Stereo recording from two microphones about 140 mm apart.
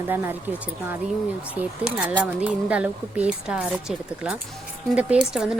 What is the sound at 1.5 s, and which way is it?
Speech, 10° right (ahead or behind).